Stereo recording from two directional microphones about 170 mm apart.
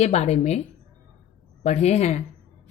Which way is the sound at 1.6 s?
40° left (ahead or behind).